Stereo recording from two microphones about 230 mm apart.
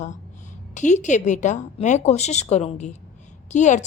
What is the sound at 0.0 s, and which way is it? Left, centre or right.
A woman's voice, left.